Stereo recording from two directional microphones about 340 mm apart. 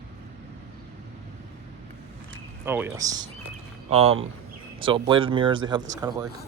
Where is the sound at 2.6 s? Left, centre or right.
Centre.